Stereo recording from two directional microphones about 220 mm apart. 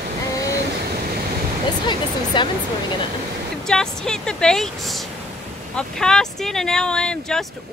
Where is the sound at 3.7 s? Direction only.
5° left (ahead or behind).